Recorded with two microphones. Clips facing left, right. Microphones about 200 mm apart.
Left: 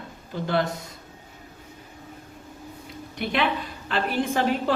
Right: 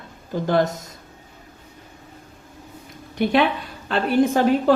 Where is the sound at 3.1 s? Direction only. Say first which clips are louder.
Right 6 dB; 45° right (ahead or behind).